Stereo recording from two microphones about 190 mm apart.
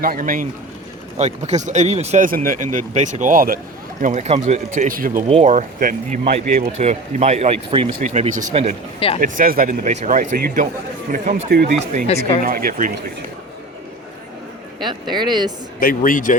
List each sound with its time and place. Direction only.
0.0 s speech: 50° right (ahead or behind)
5.3 s speech: 35° right (ahead or behind); by 11.7 s 50° right (ahead or behind)
11.7 s speech: 40° right (ahead or behind)
12.0 s speech: 35° left (ahead or behind)
12.5 s speech: 50° right (ahead or behind)
14.8 s speech: 25° right (ahead or behind)
15.8 s speech: 50° left (ahead or behind)